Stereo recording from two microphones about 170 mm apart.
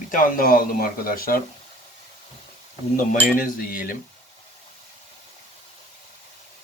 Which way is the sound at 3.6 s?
55° left (ahead or behind).